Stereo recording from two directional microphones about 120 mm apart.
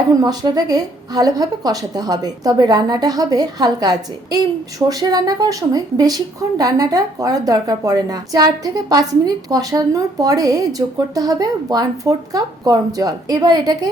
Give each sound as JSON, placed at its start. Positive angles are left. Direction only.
{"t": 0.2, "sound": "a woman's voice", "side_deg": -35}